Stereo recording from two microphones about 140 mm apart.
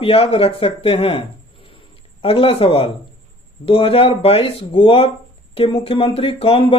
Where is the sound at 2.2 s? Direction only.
45° left (ahead or behind).